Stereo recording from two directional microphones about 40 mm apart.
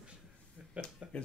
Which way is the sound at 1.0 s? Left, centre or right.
Right.